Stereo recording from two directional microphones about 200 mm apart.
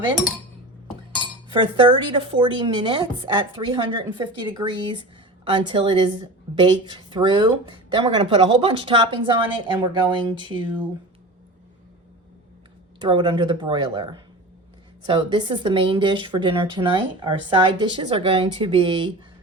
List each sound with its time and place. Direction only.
1.5 s speech: 25° right (ahead or behind)
13.0 s speech: 25° right (ahead or behind)